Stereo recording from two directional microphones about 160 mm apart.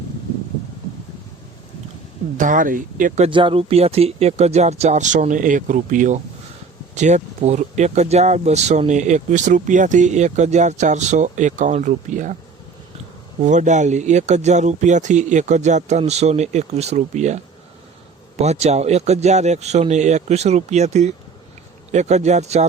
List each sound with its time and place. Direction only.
2.4 s speech: 55° right (ahead or behind)
3.2 s speech: 35° right (ahead or behind); by 12.3 s 55° right (ahead or behind)
13.4 s speech: 50° right (ahead or behind)